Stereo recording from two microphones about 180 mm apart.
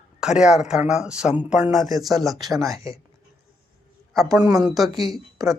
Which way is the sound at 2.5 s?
20° right (ahead or behind).